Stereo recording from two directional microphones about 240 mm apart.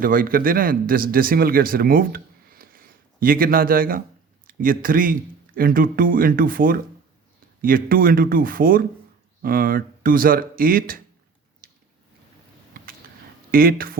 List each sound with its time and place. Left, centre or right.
0.0 s speech: right
11.6 s a sound: right
13.5 s speech: right